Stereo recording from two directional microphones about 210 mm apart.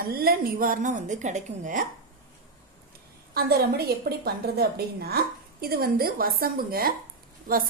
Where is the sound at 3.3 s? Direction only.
50° right (ahead or behind).